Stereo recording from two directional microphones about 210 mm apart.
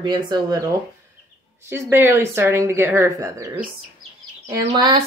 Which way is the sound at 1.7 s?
10° right (ahead or behind).